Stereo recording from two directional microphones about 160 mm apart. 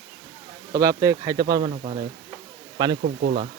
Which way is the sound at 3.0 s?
85° right.